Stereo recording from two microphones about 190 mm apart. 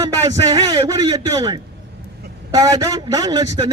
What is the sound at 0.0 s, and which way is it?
A man's voice, 20° right (ahead or behind).